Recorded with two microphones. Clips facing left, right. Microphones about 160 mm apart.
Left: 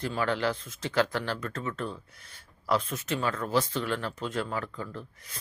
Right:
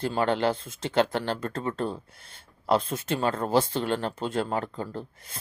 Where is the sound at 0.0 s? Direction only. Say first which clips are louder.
Right 4 dB; 30° right (ahead or behind).